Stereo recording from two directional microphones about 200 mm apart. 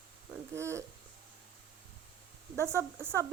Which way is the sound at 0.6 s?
15° right (ahead or behind).